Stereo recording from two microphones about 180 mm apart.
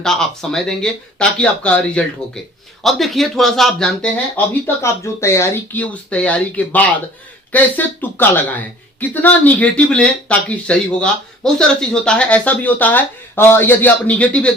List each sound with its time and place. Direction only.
0.0 s speech: 5° left (ahead or behind)